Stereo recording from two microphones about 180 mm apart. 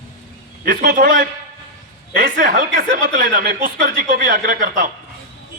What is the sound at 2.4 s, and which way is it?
Speech, 50° right (ahead or behind).